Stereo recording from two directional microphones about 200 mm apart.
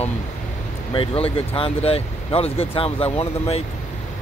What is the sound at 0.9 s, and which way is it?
Speech, 25° left (ahead or behind).